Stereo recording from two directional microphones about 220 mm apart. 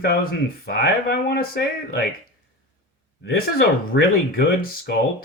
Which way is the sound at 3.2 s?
45° left (ahead or behind).